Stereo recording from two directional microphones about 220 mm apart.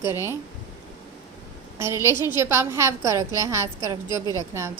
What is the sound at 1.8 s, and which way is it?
A woman's voice, 10° right (ahead or behind).